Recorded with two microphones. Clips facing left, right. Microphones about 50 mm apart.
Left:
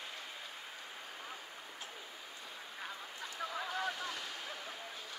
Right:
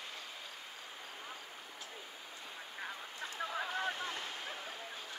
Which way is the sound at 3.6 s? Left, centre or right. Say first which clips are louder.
Right 1 dB; right.